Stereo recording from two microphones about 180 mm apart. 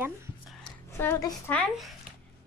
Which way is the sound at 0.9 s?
15° left (ahead or behind).